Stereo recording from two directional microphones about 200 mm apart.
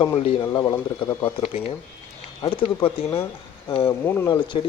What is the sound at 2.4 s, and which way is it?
Speech, 25° left (ahead or behind).